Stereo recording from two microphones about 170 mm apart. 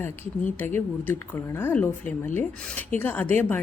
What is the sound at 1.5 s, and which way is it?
A woman's voice, 10° left (ahead or behind).